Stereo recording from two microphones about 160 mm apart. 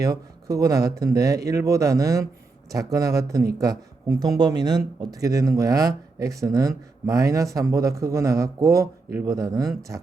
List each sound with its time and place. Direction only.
0.0 s speech: 20° right (ahead or behind)